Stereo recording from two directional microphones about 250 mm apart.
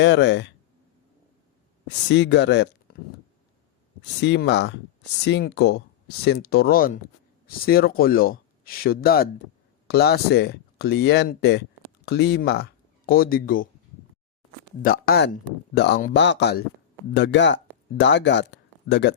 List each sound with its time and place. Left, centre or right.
0.0 s speech: left
1.9 s speech: left
4.0 s speech: left
14.8 s speech: left